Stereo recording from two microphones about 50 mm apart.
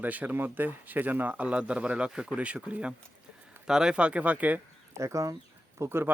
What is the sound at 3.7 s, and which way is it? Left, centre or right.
Speech, centre.